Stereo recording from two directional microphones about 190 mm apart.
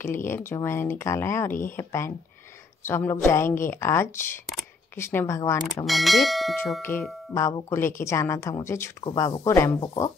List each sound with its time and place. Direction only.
0.0 s speech: 15° left (ahead or behind)
5.9 s speech: centre (ahead or behind)
6.8 s speech: 15° left (ahead or behind)